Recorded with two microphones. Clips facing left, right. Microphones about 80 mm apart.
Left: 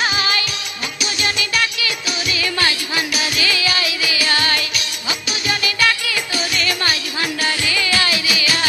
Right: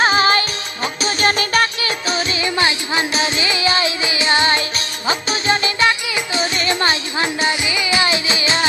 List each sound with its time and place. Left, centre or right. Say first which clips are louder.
0.0 s music: right 6 dB; right